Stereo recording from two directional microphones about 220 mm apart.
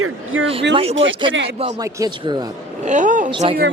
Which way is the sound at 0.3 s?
65° right (ahead or behind).